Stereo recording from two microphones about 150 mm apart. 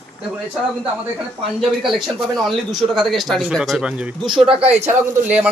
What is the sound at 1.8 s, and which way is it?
Speech, centre (ahead or behind).